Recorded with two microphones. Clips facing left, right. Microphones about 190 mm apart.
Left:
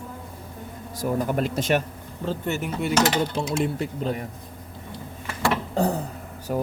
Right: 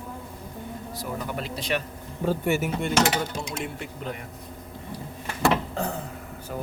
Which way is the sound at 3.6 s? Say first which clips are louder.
Left 8 dB; 35° left (ahead or behind).